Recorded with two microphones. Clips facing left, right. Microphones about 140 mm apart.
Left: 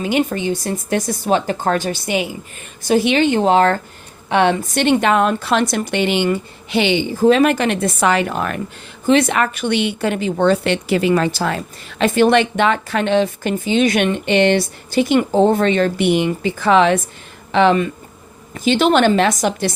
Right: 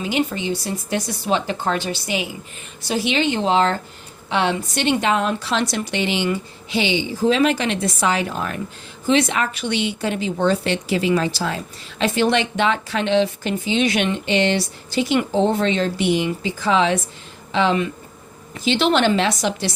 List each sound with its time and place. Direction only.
0.0 s a woman's voice: 50° left (ahead or behind)
9.0 s a woman's voice: 55° left (ahead or behind)